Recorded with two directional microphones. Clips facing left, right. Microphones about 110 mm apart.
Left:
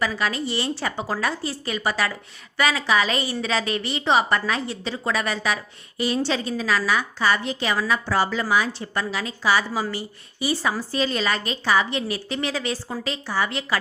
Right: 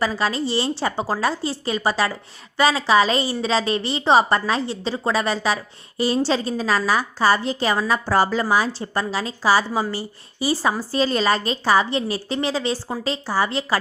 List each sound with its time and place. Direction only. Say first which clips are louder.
0.0 s a woman's voice: right 3 dB; 30° right (ahead or behind)